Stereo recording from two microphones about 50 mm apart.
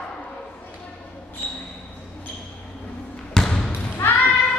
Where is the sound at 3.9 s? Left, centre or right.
Left.